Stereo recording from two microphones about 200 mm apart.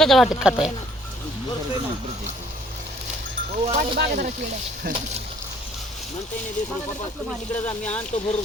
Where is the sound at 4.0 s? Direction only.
50° right (ahead or behind).